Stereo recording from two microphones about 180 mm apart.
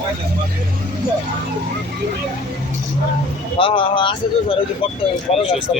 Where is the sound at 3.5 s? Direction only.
30° left (ahead or behind).